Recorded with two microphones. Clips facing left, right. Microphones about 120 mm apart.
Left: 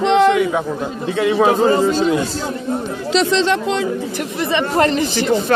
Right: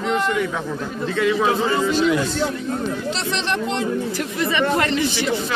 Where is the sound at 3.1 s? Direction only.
90° left.